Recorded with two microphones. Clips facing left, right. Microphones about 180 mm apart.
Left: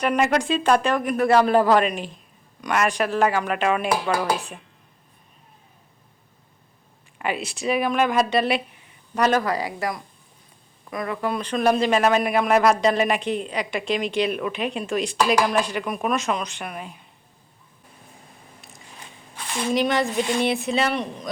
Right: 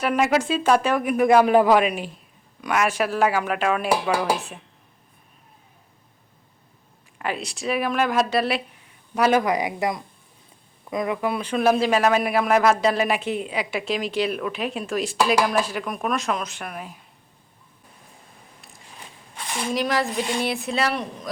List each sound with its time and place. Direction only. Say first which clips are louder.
0.0 s a man's voice: even; centre (ahead or behind)
7.2 s a man's voice: left 1 dB; centre (ahead or behind)
19.5 s a man's voice: left 3 dB; 10° right (ahead or behind)